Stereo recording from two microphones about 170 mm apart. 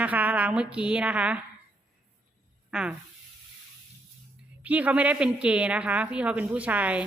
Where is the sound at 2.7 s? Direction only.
5° right (ahead or behind).